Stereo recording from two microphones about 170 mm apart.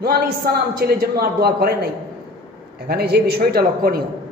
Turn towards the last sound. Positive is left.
turn(degrees=-65)  # may be behind; listen again after turning